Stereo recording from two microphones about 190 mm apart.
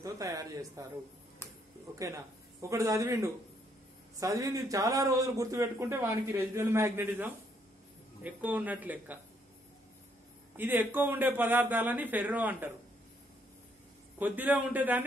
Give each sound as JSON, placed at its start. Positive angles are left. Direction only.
{"t": 0.0, "sound": "a man's voice", "side_deg": -15}
{"t": 2.0, "sound": "a man's voice", "side_deg": -15}
{"t": 10.5, "sound": "a man's voice", "side_deg": -10}
{"t": 14.1, "sound": "a man's voice", "side_deg": -10}